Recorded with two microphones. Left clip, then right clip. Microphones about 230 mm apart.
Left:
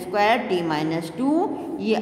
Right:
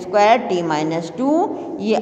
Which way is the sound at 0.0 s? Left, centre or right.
Centre.